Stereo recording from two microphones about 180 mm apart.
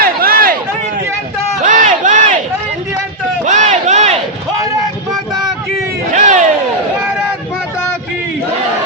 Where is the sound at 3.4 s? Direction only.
40° right (ahead or behind).